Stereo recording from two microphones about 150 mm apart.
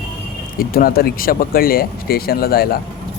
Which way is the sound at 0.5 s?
75° left (ahead or behind).